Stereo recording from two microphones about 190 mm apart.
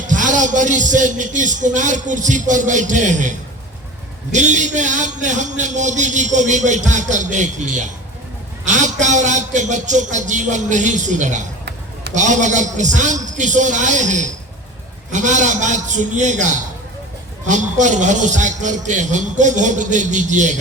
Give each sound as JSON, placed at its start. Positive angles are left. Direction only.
{"t": 0.1, "sound": "a man's voice", "side_deg": -40}